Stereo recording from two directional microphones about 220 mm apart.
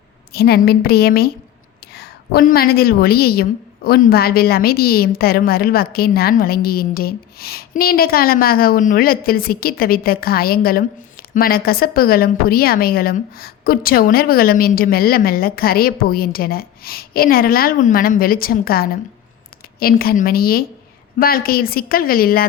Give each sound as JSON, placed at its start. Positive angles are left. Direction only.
{"t": 0.3, "sound": "a woman's voice", "side_deg": 45}